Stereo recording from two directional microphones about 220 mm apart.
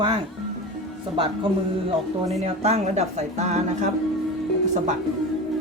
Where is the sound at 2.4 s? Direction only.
30° right (ahead or behind).